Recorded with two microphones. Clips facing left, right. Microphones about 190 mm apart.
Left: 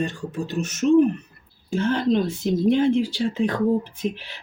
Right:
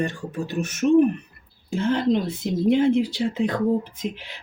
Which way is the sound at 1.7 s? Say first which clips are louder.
Even; 20° right (ahead or behind).